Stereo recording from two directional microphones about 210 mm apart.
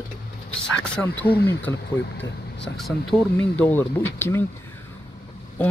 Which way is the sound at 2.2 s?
55° left (ahead or behind).